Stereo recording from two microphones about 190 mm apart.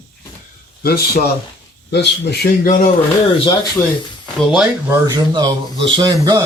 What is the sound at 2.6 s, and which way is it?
Speech, 45° left (ahead or behind).